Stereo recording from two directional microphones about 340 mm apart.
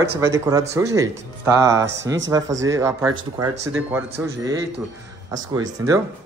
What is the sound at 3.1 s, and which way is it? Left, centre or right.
Speech, right.